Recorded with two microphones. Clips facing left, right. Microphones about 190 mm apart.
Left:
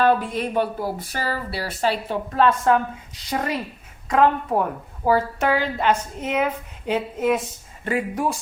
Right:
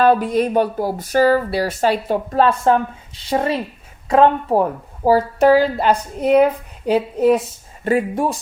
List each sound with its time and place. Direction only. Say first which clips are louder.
0.0 s speech: right 5 dB; 40° right (ahead or behind)